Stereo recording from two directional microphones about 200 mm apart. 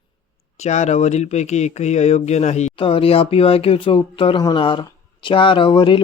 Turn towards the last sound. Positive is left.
turn(degrees=25)  # may be behind; listen again after turning